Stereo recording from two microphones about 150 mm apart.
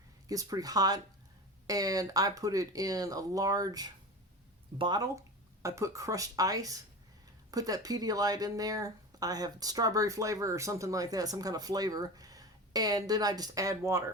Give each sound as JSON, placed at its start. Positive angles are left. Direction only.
{"t": 0.3, "sound": "speech", "side_deg": -25}